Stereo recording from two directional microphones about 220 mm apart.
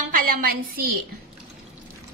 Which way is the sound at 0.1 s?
40° right (ahead or behind).